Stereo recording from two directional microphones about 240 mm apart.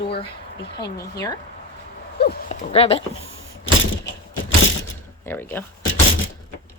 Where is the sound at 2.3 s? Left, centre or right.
Left.